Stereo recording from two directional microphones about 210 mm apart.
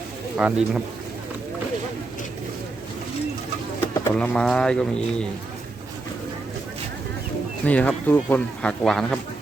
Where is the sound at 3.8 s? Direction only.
10° left (ahead or behind).